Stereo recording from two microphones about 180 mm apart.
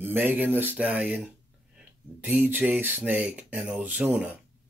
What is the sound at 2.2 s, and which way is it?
Speech, 10° right (ahead or behind).